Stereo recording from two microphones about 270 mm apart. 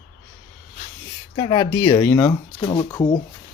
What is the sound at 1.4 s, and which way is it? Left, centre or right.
Speech, centre.